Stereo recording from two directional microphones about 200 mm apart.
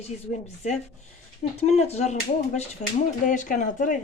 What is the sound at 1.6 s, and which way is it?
Speech, 30° left (ahead or behind).